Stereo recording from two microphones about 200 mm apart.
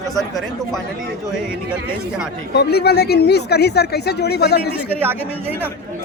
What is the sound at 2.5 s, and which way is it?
Speech, 55° left (ahead or behind).